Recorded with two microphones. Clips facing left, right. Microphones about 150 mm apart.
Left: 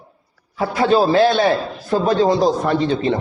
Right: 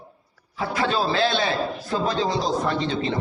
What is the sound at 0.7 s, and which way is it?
A man's voice, 40° left (ahead or behind).